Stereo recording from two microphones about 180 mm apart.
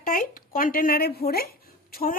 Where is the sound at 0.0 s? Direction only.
50° left (ahead or behind).